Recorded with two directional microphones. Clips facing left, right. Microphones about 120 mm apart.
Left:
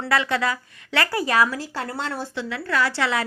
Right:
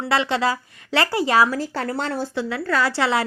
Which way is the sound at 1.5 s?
50° right (ahead or behind).